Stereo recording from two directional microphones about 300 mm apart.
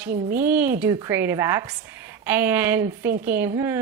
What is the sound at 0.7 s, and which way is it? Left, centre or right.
Speech, centre.